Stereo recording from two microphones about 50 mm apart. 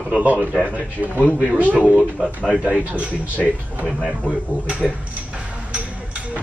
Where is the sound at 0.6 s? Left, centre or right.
Right.